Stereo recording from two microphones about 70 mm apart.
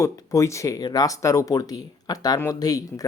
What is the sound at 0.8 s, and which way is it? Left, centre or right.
Speech, left.